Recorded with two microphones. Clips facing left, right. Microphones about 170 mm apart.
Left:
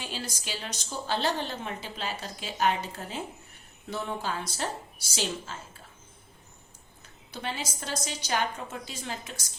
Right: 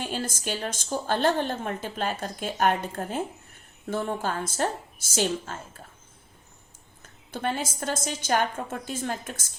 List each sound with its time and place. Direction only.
0.0 s a woman's voice: 50° right (ahead or behind)
7.0 s a woman's voice: 50° right (ahead or behind)